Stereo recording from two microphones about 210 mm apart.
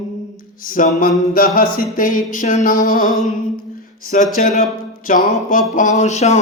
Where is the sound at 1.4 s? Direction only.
45° left (ahead or behind).